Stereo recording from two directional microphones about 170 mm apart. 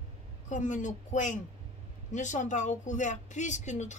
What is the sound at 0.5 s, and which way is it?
Speech, 45° left (ahead or behind).